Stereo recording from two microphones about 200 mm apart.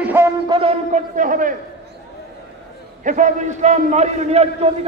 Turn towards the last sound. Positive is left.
turn(degrees=-30)  # may be behind; listen again after turning